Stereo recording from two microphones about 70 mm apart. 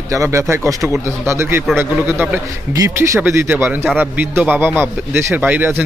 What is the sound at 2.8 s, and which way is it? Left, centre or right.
A man's voice, right.